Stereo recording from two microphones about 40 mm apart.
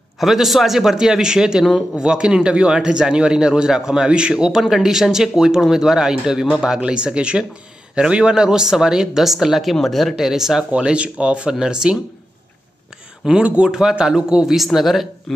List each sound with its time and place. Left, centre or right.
0.2 s a man's voice: centre
10.7 s speech: right
13.2 s a man's voice: centre